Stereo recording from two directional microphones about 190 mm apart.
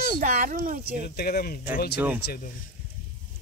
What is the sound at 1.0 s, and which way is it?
Speech, 55° left (ahead or behind).